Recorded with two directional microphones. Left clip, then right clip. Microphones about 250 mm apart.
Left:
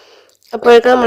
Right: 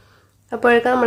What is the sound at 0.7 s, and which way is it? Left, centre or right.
Speech, left.